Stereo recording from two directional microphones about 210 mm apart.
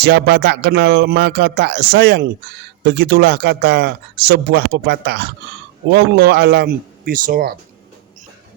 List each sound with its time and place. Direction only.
0.0 s speech: 50° right (ahead or behind)